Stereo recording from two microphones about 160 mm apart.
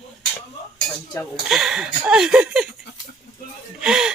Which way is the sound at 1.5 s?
Centre (ahead or behind).